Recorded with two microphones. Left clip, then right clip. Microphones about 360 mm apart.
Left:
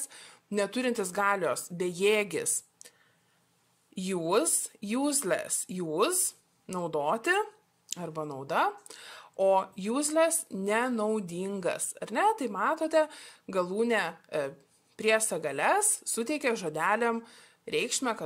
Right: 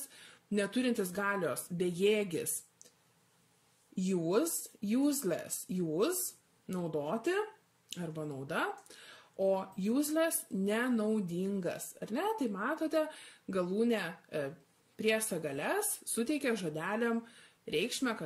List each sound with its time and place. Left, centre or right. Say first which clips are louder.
0.1 s speech: left 2 dB; centre
3.9 s a woman's voice: left 4 dB; centre
7.1 s a woman's voice: left 8 dB; centre